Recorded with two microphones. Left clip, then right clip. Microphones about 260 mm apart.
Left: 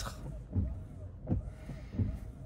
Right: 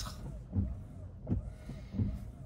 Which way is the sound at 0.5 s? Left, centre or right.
Right.